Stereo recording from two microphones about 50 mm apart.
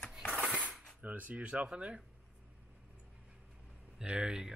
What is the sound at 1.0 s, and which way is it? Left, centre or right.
Dishes, right.